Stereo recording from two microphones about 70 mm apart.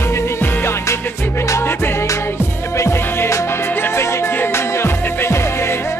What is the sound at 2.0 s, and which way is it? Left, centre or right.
Music, left.